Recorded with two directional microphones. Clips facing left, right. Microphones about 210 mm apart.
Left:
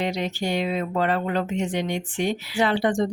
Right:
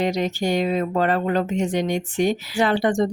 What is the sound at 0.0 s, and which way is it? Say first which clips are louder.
Speech: right 4 dB; 45° right (ahead or behind).